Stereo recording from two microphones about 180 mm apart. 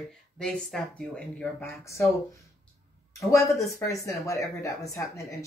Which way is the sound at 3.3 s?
15° left (ahead or behind).